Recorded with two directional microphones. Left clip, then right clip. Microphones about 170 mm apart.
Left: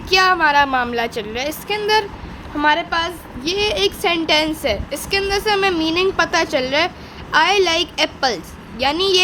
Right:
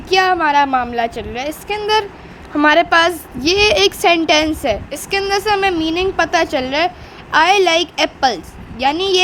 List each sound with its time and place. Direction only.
0.1 s a woman's voice: 15° right (ahead or behind)
2.6 s a woman's voice: 35° right (ahead or behind); by 9.2 s 10° right (ahead or behind)